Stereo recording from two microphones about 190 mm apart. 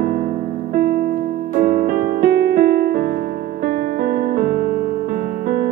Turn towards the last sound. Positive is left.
turn(degrees=-50)  # may be behind; listen again after turning